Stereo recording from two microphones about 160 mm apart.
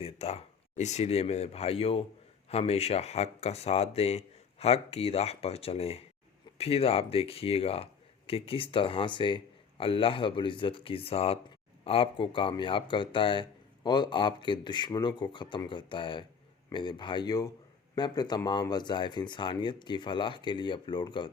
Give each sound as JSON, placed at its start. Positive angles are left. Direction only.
{"t": 0.0, "sound": "speech", "side_deg": 40}